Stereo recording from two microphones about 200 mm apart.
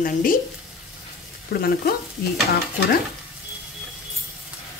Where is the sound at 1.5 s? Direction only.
55° left (ahead or behind).